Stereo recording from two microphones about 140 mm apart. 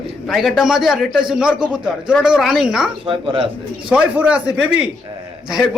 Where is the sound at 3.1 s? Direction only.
40° right (ahead or behind).